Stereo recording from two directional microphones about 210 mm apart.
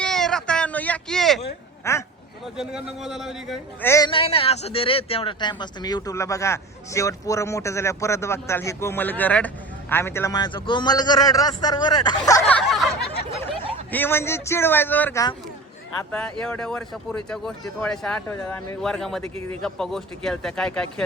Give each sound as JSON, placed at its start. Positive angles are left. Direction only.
{"t": 0.0, "sound": "a sound", "side_deg": 5}
{"t": 1.8, "sound": "speech", "side_deg": 15}
{"t": 2.6, "sound": "speech", "side_deg": 0}
{"t": 3.8, "sound": "speech", "side_deg": 15}
{"t": 4.1, "sound": "a man's voice", "side_deg": 25}
{"t": 13.9, "sound": "speech", "side_deg": 10}
{"t": 16.4, "sound": "speech", "side_deg": 5}